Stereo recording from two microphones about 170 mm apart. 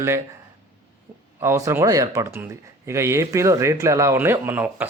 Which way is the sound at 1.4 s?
15° right (ahead or behind).